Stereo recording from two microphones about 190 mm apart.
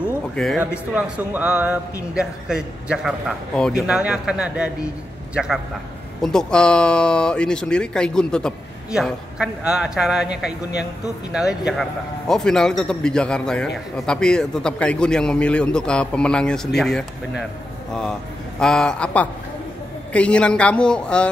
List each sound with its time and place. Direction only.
0.0 s a sound: 5° left (ahead or behind)
0.9 s a man's voice: 5° right (ahead or behind)
11.3 s speech: centre (ahead or behind)
18.6 s speech: 5° left (ahead or behind)